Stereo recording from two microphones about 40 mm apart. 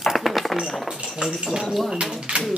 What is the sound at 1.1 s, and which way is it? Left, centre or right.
Speech, centre.